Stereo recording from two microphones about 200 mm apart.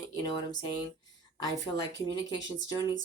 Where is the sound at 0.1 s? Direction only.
20° left (ahead or behind).